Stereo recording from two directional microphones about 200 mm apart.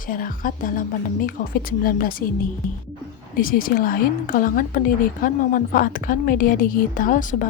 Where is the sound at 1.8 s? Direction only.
45° left (ahead or behind).